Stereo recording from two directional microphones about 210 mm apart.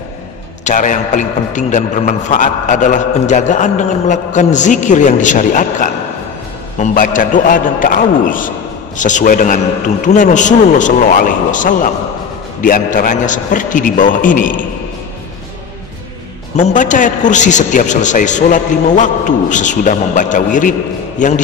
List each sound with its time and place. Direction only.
0.7 s a man's voice: 35° left (ahead or behind)
16.5 s a man's voice: 35° left (ahead or behind)